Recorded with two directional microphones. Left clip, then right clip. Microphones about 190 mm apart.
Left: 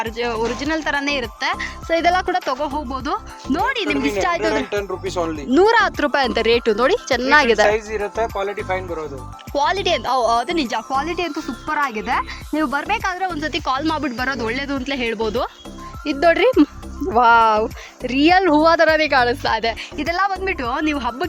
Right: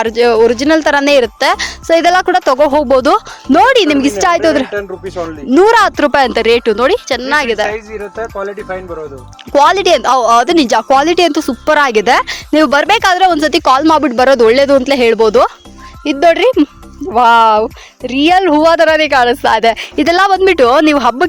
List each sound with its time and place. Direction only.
0.0 s speech: 25° right (ahead or behind)
1.9 s speech: 15° right (ahead or behind)
3.0 s speech: 30° right (ahead or behind)
4.7 s speech: centre (ahead or behind)
5.5 s speech: 15° right (ahead or behind)
9.5 s speech: 20° right (ahead or behind)
16.0 s speech: 10° right (ahead or behind)
20.0 s speech: 35° right (ahead or behind)